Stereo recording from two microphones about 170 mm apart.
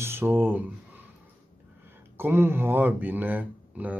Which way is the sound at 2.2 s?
15° right (ahead or behind).